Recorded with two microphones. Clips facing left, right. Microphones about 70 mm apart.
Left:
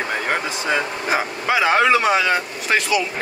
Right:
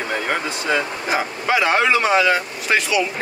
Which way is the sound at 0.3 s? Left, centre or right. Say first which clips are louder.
Even; centre.